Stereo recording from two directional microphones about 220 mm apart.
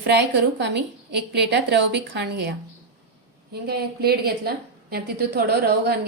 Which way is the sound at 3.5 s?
45° right (ahead or behind).